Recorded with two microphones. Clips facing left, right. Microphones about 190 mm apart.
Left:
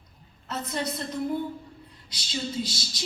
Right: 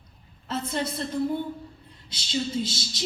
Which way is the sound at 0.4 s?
30° right (ahead or behind).